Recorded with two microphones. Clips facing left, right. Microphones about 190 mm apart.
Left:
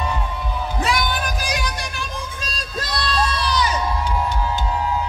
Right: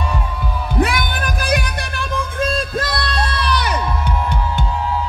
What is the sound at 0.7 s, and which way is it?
Music, 55° right (ahead or behind).